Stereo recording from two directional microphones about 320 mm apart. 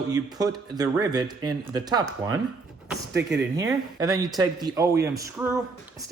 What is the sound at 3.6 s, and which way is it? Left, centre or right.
A man's voice, centre.